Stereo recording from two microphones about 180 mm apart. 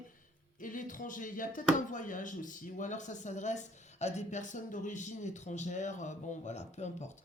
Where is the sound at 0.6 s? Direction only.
45° left (ahead or behind).